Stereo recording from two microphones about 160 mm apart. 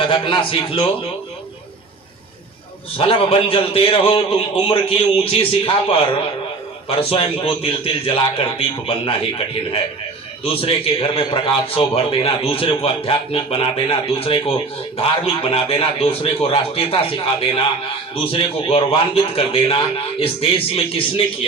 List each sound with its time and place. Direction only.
0.0 s a man's voice: 30° left (ahead or behind)
3.0 s a man's voice: 35° left (ahead or behind)
10.4 s a man's voice: 35° left (ahead or behind)